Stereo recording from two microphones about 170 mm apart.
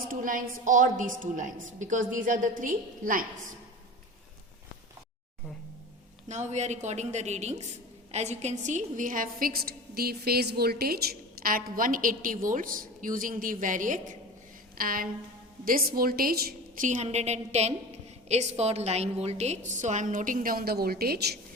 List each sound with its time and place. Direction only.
0.1 s a woman's voice: 50° right (ahead or behind)
6.2 s a woman's voice: 45° right (ahead or behind)
14.8 s a sound: 60° right (ahead or behind)
15.6 s a woman's voice: 60° right (ahead or behind)